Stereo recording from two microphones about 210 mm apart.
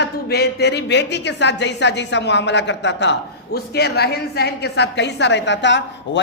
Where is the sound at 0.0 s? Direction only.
50° left (ahead or behind).